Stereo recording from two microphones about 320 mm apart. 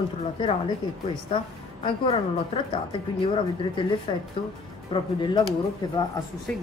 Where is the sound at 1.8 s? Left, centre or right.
Centre.